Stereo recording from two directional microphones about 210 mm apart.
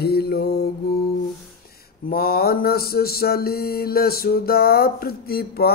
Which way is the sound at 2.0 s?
45° left (ahead or behind).